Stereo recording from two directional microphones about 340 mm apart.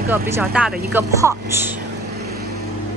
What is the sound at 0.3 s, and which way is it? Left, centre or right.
A woman's voice, centre.